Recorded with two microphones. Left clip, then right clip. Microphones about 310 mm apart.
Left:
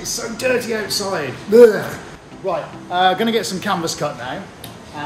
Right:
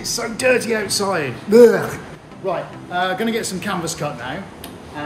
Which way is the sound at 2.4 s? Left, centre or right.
Centre.